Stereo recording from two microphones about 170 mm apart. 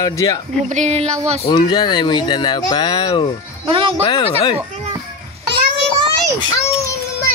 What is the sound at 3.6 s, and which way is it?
Speech, 30° right (ahead or behind).